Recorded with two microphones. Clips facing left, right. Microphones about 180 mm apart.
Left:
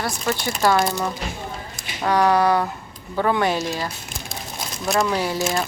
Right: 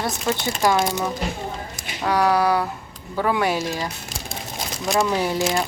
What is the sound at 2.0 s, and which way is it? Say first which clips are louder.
Speech: left 1 dB; 5° right (ahead or behind).